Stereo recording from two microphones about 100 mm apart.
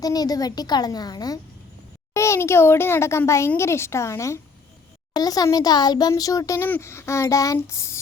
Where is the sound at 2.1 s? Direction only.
30° left (ahead or behind).